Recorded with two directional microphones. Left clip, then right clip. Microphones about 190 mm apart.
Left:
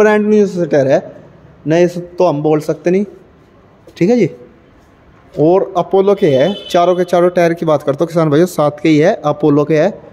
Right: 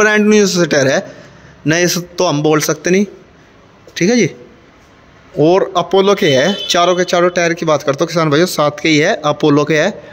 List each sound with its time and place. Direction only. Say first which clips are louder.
0.0 s a man's voice: even; 5° right (ahead or behind)
5.7 s speech: even; 5° left (ahead or behind)